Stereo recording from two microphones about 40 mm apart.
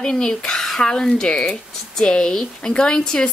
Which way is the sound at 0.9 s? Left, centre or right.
Centre.